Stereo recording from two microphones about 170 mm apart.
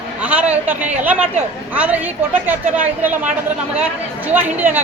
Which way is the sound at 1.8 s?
10° right (ahead or behind).